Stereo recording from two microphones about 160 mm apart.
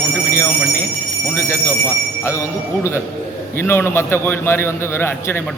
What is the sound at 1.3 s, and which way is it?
A man's voice, 15° left (ahead or behind).